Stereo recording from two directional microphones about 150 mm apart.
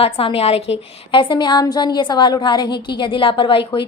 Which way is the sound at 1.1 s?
30° left (ahead or behind).